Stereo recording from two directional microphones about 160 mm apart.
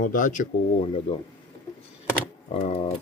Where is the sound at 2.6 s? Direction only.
45° left (ahead or behind).